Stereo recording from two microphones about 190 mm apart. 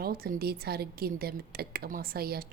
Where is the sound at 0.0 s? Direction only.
50° right (ahead or behind).